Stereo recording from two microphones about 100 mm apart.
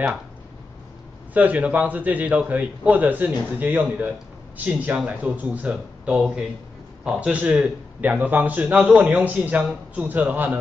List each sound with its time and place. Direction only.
1.3 s a man's voice: 15° right (ahead or behind)